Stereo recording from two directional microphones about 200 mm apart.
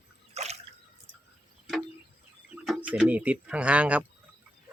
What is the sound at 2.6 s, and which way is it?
Speech, 5° right (ahead or behind).